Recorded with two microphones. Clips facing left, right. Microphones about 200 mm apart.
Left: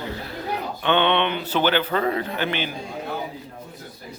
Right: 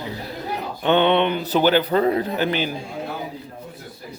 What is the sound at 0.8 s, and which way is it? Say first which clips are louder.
A man's voice: right 4 dB; 40° right (ahead or behind).